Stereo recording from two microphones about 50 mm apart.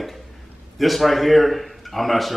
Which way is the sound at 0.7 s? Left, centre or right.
Centre.